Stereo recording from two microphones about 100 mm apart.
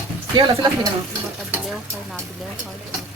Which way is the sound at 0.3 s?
50° right (ahead or behind).